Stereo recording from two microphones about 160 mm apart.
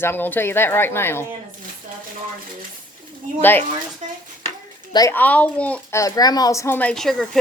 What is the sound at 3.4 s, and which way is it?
Speech, 10° left (ahead or behind).